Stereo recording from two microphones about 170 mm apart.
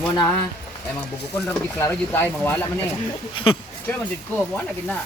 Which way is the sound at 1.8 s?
10° left (ahead or behind).